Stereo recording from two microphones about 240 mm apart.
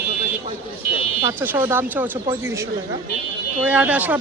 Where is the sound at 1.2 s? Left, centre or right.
Centre.